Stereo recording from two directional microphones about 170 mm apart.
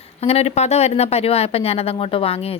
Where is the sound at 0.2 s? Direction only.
35° left (ahead or behind).